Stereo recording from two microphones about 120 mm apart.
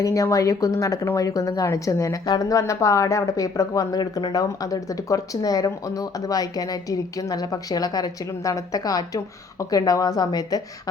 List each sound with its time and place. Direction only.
0.0 s speech: 30° left (ahead or behind)